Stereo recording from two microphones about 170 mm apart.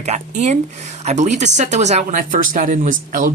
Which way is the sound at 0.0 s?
40° right (ahead or behind).